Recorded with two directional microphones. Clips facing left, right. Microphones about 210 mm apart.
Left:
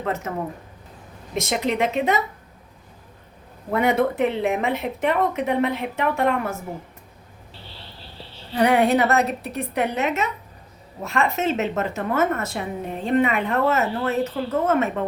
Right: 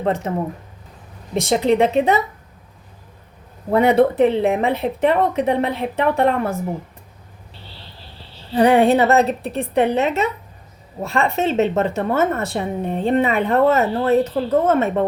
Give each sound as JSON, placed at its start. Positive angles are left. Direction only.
{"t": 0.0, "sound": "a woman's voice", "side_deg": -30}
{"t": 3.7, "sound": "a woman's voice", "side_deg": -30}
{"t": 8.5, "sound": "a woman's voice", "side_deg": -30}